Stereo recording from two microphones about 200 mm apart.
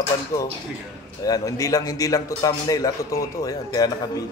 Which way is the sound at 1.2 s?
15° left (ahead or behind).